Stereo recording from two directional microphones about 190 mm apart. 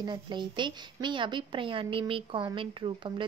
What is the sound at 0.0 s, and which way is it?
A woman's voice, 25° right (ahead or behind).